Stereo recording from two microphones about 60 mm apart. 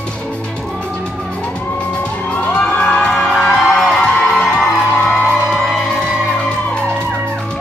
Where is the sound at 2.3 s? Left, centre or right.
Left.